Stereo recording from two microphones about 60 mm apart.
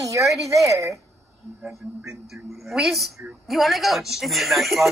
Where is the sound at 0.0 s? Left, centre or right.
Right.